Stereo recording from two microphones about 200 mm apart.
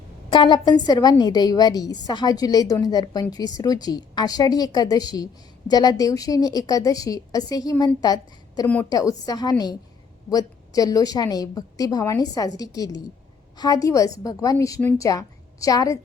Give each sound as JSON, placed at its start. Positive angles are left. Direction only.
{"t": 0.3, "sound": "a woman's voice", "side_deg": 25}
{"t": 8.6, "sound": "a woman's voice", "side_deg": 10}